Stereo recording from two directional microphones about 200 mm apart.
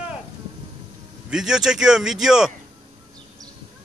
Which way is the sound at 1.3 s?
5° right (ahead or behind).